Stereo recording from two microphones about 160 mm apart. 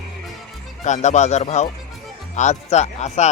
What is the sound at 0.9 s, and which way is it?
Speech, 45° left (ahead or behind).